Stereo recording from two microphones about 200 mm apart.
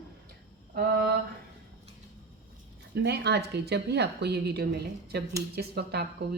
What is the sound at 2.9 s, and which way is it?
A woman's voice, 55° right (ahead or behind).